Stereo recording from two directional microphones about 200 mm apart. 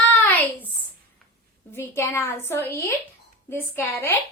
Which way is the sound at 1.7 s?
10° left (ahead or behind).